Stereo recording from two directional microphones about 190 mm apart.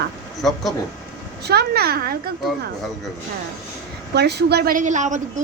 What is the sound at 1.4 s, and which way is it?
Speech, 55° right (ahead or behind).